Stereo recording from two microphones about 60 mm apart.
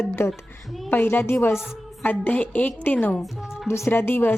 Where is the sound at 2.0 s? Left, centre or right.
Left.